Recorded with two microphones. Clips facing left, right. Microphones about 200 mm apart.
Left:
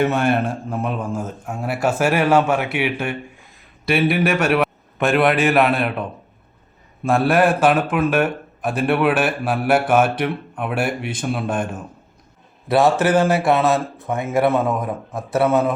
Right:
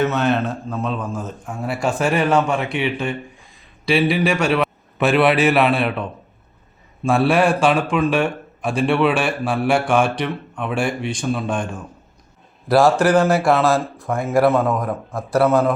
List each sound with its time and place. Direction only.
0.0 s a man's voice: 10° left (ahead or behind)
13.1 s speech: 25° left (ahead or behind)
13.4 s a man's voice: centre (ahead or behind)